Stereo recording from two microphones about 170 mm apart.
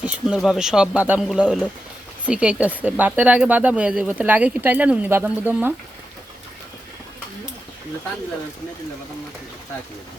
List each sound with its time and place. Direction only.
0.0 s speech: 5° right (ahead or behind)